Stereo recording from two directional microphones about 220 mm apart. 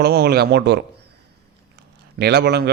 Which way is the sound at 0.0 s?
45° right (ahead or behind).